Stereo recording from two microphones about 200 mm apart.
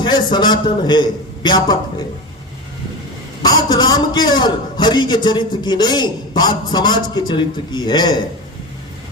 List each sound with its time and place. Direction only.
0.0 s a man's voice: 20° left (ahead or behind)
3.4 s a man's voice: 20° left (ahead or behind)